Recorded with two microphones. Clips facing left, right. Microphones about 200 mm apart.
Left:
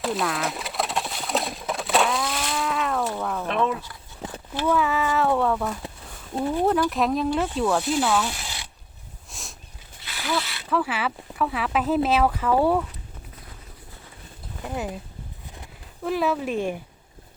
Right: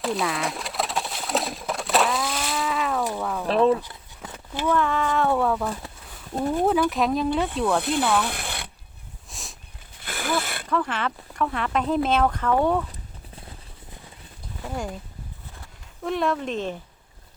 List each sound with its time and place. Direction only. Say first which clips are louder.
0.0 s bird: even; centre (ahead or behind)
3.2 s speech: even; centre (ahead or behind)
3.4 s speech: right 7 dB; 35° right (ahead or behind)
4.2 s a sound: left 5 dB; 25° left (ahead or behind)
4.6 s speech: even; 5° left (ahead or behind)
6.9 s speech: even; centre (ahead or behind)
7.8 s speech: even; 60° right (ahead or behind)
8.2 s a sound: right 1 dB; 55° right (ahead or behind)
9.3 s a sound: even; centre (ahead or behind)
10.0 s a sound: right 1 dB; 50° right (ahead or behind)
10.7 s speech: left 1 dB; 5° left (ahead or behind)
14.6 s speech: left 1 dB; 5° left (ahead or behind)
16.0 s speech: left 1 dB; 5° left (ahead or behind)